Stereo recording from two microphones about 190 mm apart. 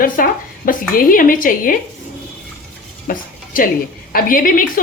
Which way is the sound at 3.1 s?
45° left (ahead or behind).